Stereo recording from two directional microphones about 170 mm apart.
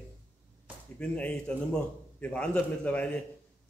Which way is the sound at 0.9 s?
5° left (ahead or behind).